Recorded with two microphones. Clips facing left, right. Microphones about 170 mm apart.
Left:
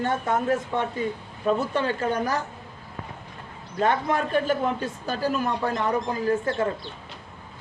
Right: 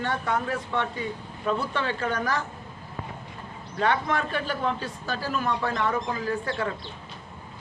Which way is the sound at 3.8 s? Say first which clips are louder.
Left 2 dB; 40° left (ahead or behind).